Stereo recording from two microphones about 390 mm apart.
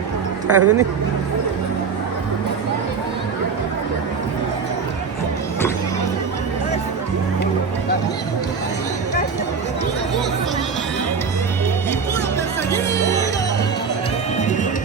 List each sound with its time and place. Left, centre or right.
0.4 s speech: right
12.7 s music: centre